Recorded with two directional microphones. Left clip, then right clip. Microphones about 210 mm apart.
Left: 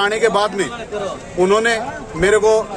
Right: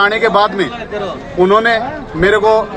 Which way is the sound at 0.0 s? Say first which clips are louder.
Right 5 dB; 10° left (ahead or behind).